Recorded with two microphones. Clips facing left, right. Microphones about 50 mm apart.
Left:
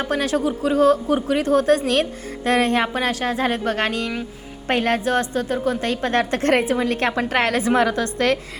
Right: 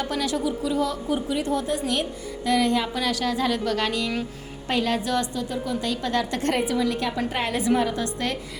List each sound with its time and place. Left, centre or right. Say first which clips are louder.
0.0 s speech: left 5 dB; left